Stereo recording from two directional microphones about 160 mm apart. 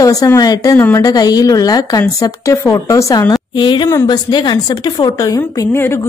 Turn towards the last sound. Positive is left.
turn(degrees=15)  # may be behind; listen again after turning